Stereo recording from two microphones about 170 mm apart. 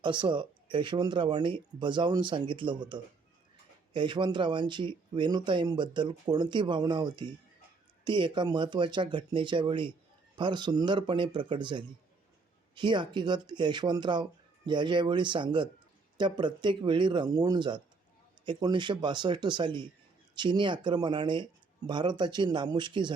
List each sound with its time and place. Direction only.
0.0 s speech: 25° right (ahead or behind)